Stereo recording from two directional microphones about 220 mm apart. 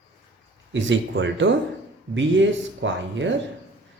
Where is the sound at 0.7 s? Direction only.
55° right (ahead or behind).